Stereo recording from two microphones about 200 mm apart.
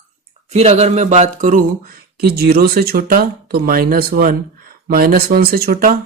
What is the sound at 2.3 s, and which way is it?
Speech, 50° right (ahead or behind).